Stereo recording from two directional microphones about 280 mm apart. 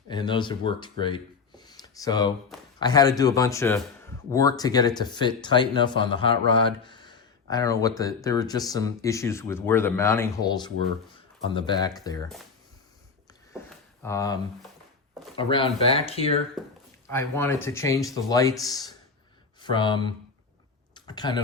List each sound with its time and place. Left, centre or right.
0.1 s speech: centre
14.0 s speech: centre
15.4 s speech: centre
17.1 s speech: centre